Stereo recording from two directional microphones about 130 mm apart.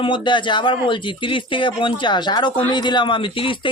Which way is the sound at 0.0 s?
40° left (ahead or behind).